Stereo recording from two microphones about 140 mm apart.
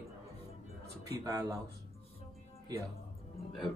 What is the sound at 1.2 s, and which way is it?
Speech, 25° right (ahead or behind).